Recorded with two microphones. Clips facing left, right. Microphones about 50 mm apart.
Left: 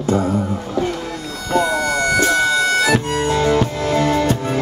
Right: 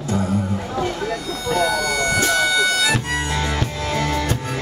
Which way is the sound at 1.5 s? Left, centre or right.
Left.